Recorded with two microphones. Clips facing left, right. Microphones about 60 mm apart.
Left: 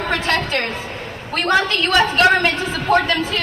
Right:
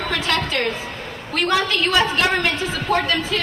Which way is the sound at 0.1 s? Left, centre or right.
Left.